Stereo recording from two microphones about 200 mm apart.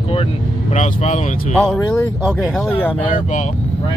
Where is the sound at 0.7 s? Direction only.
35° left (ahead or behind).